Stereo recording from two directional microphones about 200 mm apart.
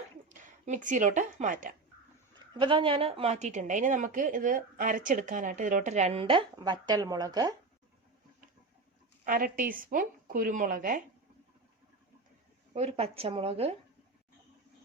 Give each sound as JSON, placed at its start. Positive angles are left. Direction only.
{"t": 0.3, "sound": "a woman's voice", "side_deg": -40}
{"t": 2.3, "sound": "a woman's voice", "side_deg": -25}
{"t": 9.2, "sound": "a woman's voice", "side_deg": -45}
{"t": 12.7, "sound": "a woman's voice", "side_deg": -30}